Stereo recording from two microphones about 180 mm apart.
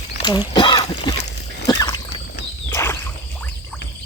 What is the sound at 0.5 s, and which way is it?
Throat clearing, 25° left (ahead or behind).